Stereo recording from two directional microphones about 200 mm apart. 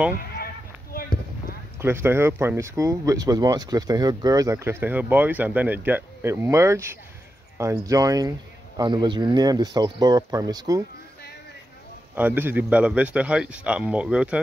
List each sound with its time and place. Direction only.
0.9 s a sound: 50° left (ahead or behind)
1.8 s speech: 10° right (ahead or behind)
12.2 s speech: 10° right (ahead or behind)